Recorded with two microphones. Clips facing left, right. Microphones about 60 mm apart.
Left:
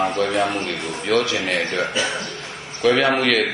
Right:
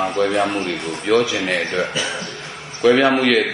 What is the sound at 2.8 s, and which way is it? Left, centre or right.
Speech, centre.